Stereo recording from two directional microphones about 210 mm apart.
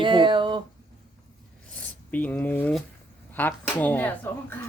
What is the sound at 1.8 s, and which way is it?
Speech, 5° left (ahead or behind).